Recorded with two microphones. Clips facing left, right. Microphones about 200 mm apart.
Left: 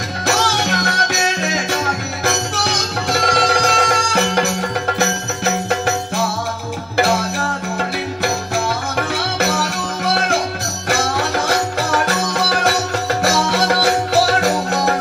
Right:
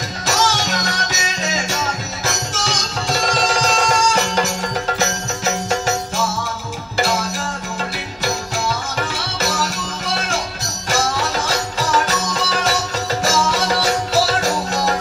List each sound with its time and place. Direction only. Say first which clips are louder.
0.3 s music: left 1 dB; 60° left (ahead or behind)
8.9 s music: left 4 dB; 60° left (ahead or behind)